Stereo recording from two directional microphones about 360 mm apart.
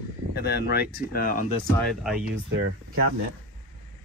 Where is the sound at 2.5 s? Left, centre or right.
Right.